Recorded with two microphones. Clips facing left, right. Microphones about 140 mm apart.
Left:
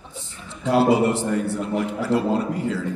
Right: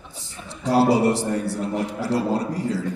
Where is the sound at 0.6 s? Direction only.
35° right (ahead or behind).